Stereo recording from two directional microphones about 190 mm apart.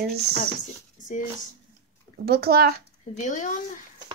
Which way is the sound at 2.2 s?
55° right (ahead or behind).